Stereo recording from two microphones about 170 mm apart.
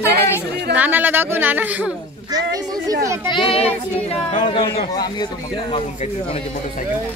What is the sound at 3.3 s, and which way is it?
Speech, 30° left (ahead or behind).